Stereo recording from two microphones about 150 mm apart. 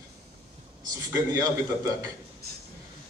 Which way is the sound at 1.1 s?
20° right (ahead or behind).